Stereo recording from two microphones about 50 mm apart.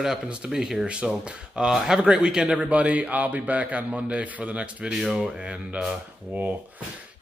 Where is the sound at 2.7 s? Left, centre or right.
Right.